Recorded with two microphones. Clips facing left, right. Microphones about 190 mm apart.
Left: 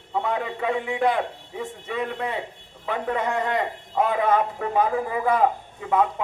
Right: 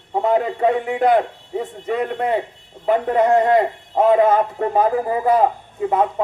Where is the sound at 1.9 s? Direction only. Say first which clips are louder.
Right 7 dB; 50° right (ahead or behind).